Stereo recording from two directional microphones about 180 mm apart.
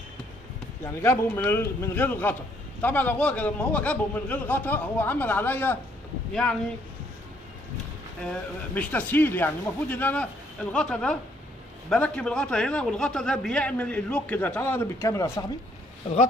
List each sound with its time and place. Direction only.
1.0 s a man's voice: 15° left (ahead or behind)
8.7 s a man's voice: 10° left (ahead or behind)
16.0 s speech: 40° left (ahead or behind)